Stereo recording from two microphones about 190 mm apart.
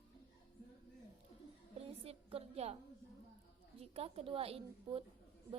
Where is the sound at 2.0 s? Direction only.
30° right (ahead or behind).